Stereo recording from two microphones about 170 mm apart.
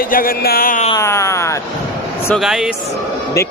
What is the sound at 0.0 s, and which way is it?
Speech, 55° left (ahead or behind).